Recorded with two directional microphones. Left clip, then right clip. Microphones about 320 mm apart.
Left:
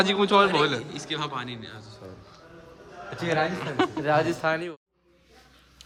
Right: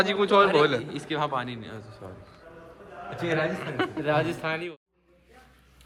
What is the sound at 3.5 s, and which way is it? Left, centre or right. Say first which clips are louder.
A man's voice: left 3 dB; centre.